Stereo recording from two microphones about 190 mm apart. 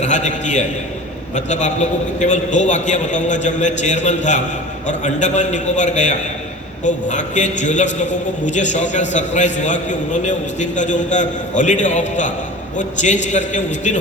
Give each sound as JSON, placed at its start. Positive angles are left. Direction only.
{"t": 0.0, "sound": "a man's voice", "side_deg": 40}